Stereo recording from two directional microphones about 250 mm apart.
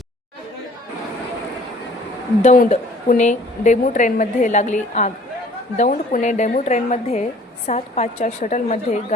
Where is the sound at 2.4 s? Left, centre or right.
Left.